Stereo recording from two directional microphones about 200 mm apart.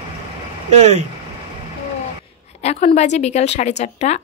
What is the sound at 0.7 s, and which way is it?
Speech, 35° right (ahead or behind).